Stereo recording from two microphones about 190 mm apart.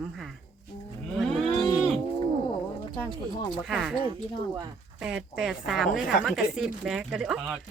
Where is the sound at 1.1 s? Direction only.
Centre (ahead or behind).